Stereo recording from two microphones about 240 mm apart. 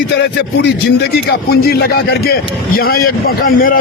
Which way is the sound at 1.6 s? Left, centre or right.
Left.